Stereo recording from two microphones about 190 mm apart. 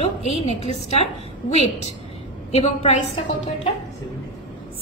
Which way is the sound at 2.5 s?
35° left (ahead or behind).